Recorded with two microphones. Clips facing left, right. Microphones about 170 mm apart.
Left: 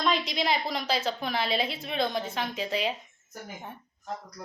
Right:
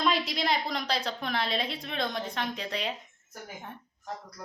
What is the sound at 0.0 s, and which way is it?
A woman's voice, centre (ahead or behind).